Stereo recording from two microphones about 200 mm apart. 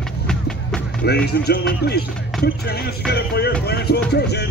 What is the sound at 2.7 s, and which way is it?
Speech, 55° left (ahead or behind).